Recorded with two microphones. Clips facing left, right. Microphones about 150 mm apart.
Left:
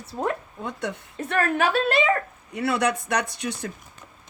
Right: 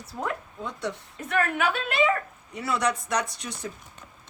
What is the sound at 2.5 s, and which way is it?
Speech, 65° left (ahead or behind).